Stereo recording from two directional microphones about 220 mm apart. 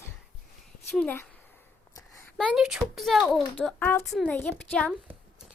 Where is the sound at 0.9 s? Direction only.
5° left (ahead or behind).